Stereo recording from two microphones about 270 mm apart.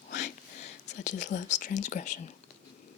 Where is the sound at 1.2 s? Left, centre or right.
Left.